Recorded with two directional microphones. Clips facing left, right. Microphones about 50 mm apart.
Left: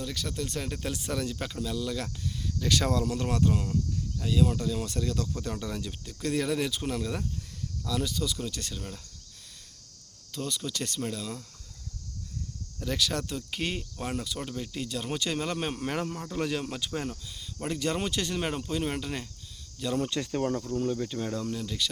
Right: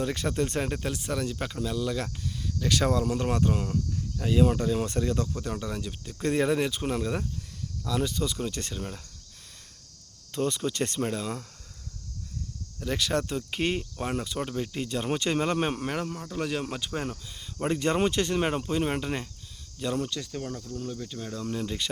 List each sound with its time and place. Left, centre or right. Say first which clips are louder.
0.0 s speech: right 6 dB; right
0.8 s speech: right 2 dB; centre
5.3 s speech: right 1 dB; centre
6.1 s speech: right 4 dB; right
10.3 s speech: right 6 dB; right
12.8 s speech: right 2 dB; centre
15.9 s speech: even; centre
16.6 s speech: right 1 dB; centre
20.1 s speech: left 5 dB; left
21.6 s speech: right 1 dB; right